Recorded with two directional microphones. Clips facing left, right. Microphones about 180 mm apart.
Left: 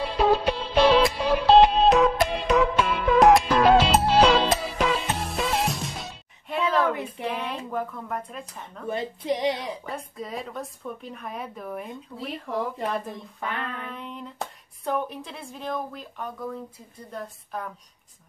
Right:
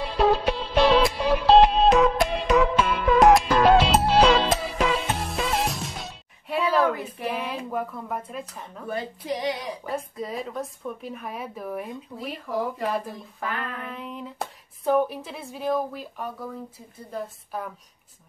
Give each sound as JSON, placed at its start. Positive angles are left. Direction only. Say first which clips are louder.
{"t": 0.0, "sound": "music", "louder": "even", "side_deg": 0}
{"t": 7.2, "sound": "a woman's voice", "louder": "right 2 dB", "side_deg": -5}
{"t": 8.9, "sound": "speech", "louder": "left 2 dB", "side_deg": 25}
{"t": 9.8, "sound": "a woman's voice", "louder": "right 4 dB", "side_deg": 0}